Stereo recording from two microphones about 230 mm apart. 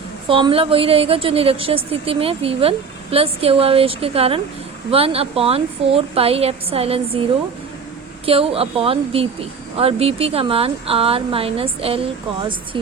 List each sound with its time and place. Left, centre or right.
0.3 s speech: right
8.2 s speech: right